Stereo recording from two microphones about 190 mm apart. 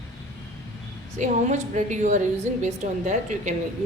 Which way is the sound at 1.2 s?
40° right (ahead or behind).